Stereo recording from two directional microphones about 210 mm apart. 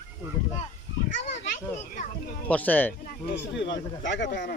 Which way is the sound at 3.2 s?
55° left (ahead or behind).